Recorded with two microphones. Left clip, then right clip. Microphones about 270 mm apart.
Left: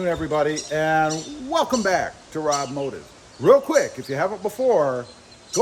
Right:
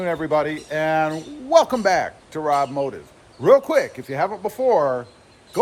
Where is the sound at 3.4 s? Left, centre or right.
Centre.